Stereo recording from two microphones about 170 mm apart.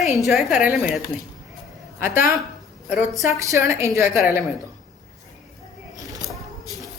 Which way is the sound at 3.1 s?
20° right (ahead or behind).